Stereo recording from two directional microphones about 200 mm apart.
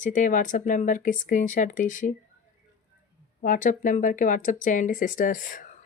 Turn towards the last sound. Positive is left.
turn(degrees=40)  # may be behind; listen again after turning